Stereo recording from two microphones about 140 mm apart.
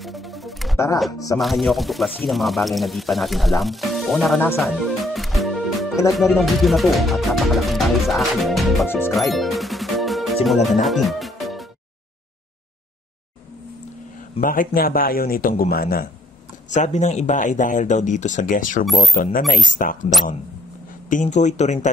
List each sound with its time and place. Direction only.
0.0 s music: centre (ahead or behind)
0.9 s speech: centre (ahead or behind)
4.6 s music: centre (ahead or behind)
6.1 s speech: centre (ahead or behind)
8.8 s speech: 15° left (ahead or behind)
9.1 s music: centre (ahead or behind)
14.4 s speech: 80° left
16.7 s speech: 55° left (ahead or behind); by 18.9 s 75° left (ahead or behind)
19.1 s speech: 85° left
21.1 s speech: 60° left (ahead or behind)